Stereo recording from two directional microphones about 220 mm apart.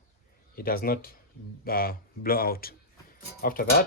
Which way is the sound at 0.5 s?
40° left (ahead or behind).